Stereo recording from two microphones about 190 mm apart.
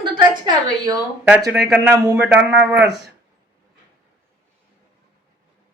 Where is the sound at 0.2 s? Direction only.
25° right (ahead or behind).